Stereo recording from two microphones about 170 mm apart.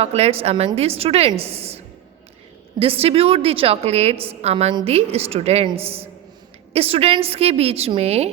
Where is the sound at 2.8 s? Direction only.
35° right (ahead or behind).